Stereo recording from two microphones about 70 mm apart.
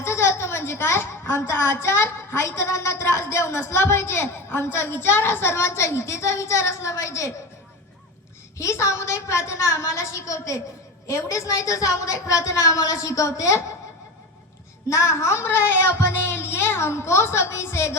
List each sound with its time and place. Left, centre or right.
0.0 s a woman's voice: left
8.5 s a woman's voice: left
14.8 s a woman's voice: left